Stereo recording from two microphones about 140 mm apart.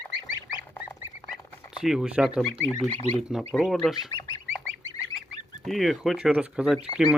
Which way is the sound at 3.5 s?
Centre (ahead or behind).